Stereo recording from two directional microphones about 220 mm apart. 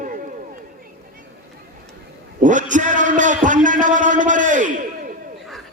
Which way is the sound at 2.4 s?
35° right (ahead or behind).